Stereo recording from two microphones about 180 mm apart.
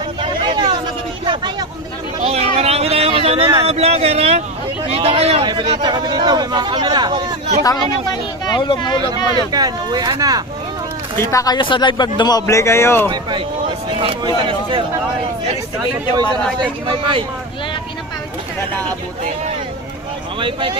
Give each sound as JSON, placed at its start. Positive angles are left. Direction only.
{"t": 0.2, "sound": "a sound", "side_deg": -25}
{"t": 4.9, "sound": "speech", "side_deg": -30}
{"t": 7.6, "sound": "speech", "side_deg": 20}
{"t": 9.5, "sound": "speech", "side_deg": -20}
{"t": 11.2, "sound": "speech", "side_deg": 15}
{"t": 14.0, "sound": "speech", "side_deg": -30}
{"t": 16.6, "sound": "speech", "side_deg": -25}
{"t": 20.4, "sound": "speech", "side_deg": -30}